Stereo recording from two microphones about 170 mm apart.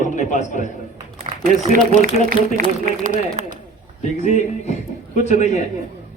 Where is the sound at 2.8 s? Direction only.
55° right (ahead or behind).